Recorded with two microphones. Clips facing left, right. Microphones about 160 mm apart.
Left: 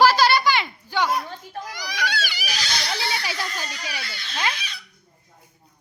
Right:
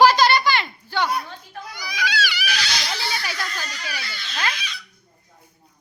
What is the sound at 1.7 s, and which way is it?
Crying, 90° left.